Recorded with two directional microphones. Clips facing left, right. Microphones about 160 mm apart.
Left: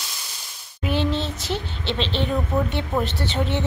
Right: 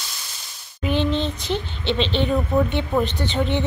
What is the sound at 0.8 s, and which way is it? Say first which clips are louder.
A woman's voice: right 2 dB; 5° left (ahead or behind).